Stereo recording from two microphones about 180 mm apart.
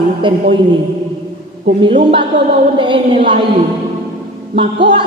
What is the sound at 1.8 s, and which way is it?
A man's voice, 30° right (ahead or behind).